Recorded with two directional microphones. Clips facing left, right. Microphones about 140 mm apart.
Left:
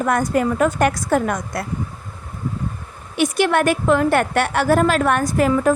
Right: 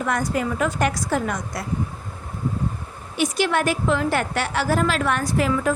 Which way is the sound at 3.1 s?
60° left (ahead or behind).